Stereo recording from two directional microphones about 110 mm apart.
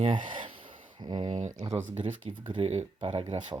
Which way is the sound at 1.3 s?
90° right.